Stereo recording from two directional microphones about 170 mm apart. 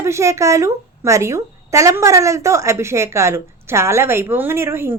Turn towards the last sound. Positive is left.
turn(degrees=-15)  # may be behind; listen again after turning